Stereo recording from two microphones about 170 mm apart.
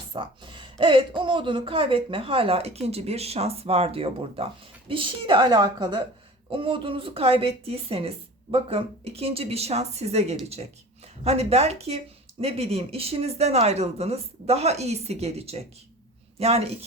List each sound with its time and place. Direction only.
0.1 s a woman's voice: 30° right (ahead or behind)